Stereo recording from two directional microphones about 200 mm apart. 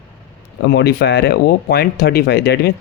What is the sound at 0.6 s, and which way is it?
Speech, 60° left (ahead or behind).